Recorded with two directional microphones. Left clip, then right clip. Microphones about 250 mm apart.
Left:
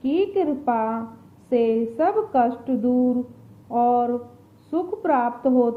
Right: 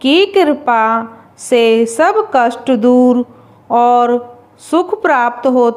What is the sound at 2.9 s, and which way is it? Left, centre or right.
Speech, right.